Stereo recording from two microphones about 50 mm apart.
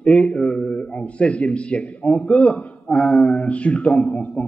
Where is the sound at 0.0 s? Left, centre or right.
Left.